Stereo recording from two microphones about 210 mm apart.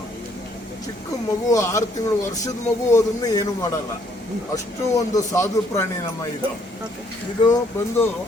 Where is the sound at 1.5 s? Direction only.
15° left (ahead or behind).